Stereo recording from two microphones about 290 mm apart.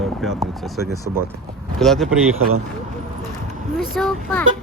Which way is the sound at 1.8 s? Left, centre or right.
Centre.